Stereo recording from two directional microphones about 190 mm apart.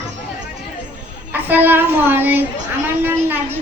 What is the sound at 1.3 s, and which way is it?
A woman's voice, 10° right (ahead or behind).